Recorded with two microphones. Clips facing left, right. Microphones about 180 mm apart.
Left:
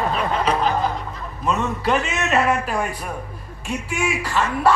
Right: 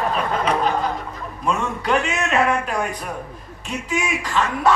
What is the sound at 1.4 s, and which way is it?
A man's voice, centre (ahead or behind).